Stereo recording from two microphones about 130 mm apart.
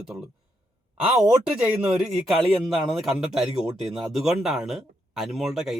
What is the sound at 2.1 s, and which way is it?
Speech, centre (ahead or behind).